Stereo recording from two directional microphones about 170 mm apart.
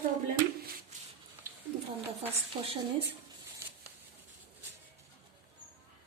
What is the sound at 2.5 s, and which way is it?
Speech, 25° right (ahead or behind).